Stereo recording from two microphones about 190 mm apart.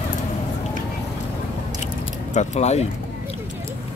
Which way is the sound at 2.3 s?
35° left (ahead or behind).